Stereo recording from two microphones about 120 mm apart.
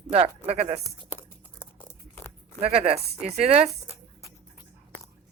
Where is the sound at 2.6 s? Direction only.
55° right (ahead or behind).